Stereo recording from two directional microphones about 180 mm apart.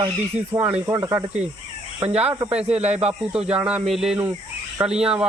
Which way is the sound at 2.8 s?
35° right (ahead or behind).